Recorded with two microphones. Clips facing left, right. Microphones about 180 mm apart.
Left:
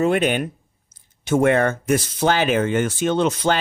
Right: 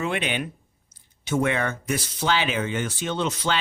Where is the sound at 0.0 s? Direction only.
45° left (ahead or behind).